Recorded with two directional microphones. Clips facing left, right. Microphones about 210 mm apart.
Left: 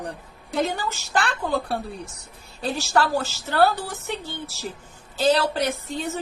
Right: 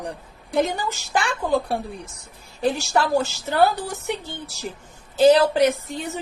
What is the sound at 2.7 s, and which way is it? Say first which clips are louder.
A woman's voice: left 2 dB; 15° right (ahead or behind).